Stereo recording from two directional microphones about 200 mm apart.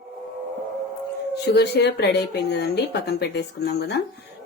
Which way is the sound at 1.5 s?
55° left (ahead or behind).